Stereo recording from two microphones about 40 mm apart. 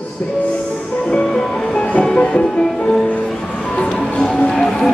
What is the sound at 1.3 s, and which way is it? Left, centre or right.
Music, centre.